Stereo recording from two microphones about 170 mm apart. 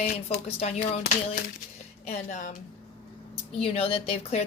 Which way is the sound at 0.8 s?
60° left (ahead or behind).